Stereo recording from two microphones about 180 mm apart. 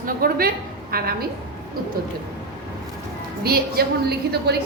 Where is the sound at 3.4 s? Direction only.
60° right (ahead or behind).